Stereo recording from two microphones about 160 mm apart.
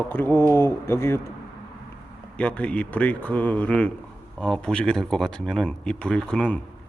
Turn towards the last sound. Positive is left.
turn(degrees=5)  # may be behind; listen again after turning